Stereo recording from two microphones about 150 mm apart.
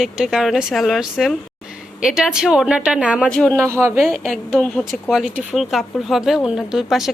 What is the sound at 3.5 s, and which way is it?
Speech, 20° right (ahead or behind).